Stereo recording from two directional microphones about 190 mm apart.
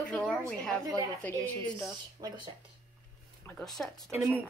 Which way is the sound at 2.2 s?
25° right (ahead or behind).